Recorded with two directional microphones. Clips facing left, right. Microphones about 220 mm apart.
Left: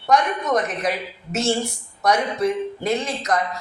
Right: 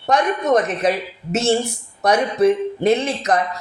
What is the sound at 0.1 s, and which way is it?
Speech, 25° right (ahead or behind).